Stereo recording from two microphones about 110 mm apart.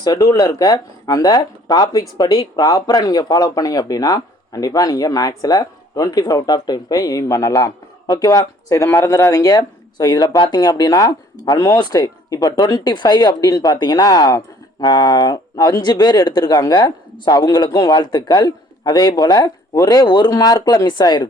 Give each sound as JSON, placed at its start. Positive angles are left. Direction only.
{"t": 0.0, "sound": "speech", "side_deg": 35}